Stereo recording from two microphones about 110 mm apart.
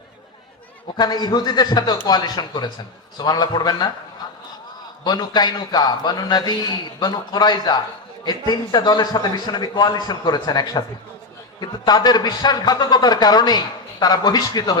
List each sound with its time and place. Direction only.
0.9 s a man's voice: 40° left (ahead or behind)
4.2 s vehicle: 45° left (ahead or behind)
5.0 s a man's voice: 40° left (ahead or behind)